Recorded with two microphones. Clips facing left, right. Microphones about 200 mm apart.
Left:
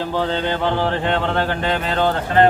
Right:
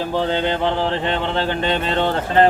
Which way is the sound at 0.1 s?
15° right (ahead or behind).